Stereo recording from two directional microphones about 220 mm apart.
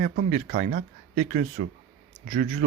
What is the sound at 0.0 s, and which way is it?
Speech, 35° right (ahead or behind).